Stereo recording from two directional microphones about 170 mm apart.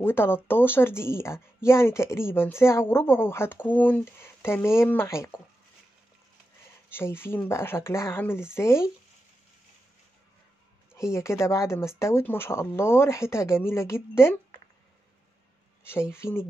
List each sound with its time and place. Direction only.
0.0 s speech: 15° left (ahead or behind)
6.9 s speech: 15° left (ahead or behind)
10.9 s a sound: 5° right (ahead or behind)
11.1 s speech: 15° left (ahead or behind)
15.8 s speech: 15° left (ahead or behind)